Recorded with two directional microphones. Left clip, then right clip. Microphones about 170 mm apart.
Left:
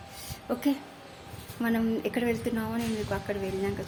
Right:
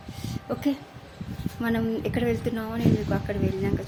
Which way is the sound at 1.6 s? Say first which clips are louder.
Right 2 dB; 5° right (ahead or behind).